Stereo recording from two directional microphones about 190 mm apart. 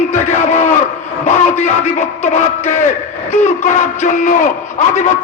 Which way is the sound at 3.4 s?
40° left (ahead or behind).